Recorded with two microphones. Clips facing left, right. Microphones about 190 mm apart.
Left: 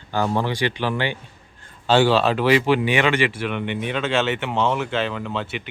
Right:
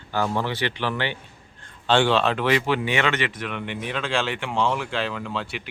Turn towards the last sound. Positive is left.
turn(degrees=0)  # may be behind; listen again after turning